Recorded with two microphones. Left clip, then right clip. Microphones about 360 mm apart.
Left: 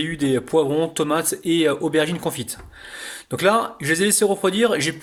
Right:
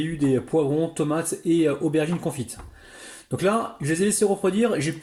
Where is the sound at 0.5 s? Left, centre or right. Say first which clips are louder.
Left 5 dB; left.